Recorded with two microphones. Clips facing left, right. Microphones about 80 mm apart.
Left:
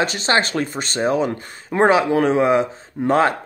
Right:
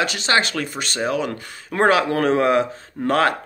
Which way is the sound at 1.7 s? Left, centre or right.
Centre.